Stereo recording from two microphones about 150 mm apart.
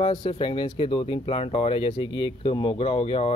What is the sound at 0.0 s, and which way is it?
Speech, 35° left (ahead or behind).